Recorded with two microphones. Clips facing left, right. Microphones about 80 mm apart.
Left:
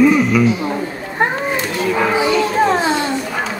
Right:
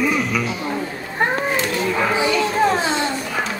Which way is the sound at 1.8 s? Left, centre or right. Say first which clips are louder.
Left 6 dB; centre.